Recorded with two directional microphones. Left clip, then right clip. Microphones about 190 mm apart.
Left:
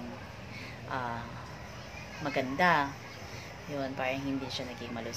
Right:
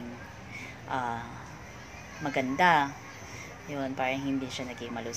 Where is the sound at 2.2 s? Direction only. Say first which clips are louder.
Right 3 dB; 20° right (ahead or behind).